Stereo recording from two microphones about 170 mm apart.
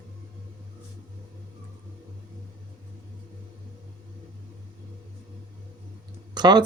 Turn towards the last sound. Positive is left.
turn(degrees=-25)  # may be behind; listen again after turning